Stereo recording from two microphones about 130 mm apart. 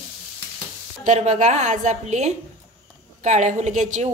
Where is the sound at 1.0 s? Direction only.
65° right (ahead or behind).